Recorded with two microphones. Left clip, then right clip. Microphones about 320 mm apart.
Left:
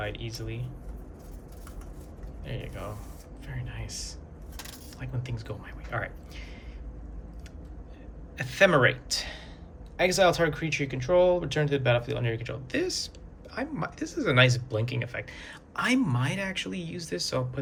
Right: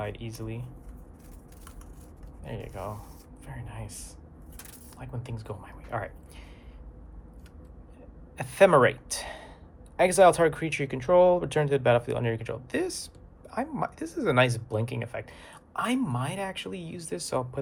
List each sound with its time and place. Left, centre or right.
0.0 s speech: centre
2.4 s speech: centre
8.4 s speech: centre